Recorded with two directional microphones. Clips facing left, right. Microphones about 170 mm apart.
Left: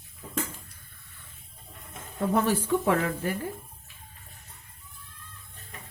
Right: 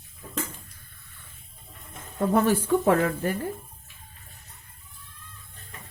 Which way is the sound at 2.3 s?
50° right (ahead or behind).